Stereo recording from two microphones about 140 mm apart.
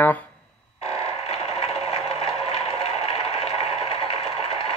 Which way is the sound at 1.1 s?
45° left (ahead or behind).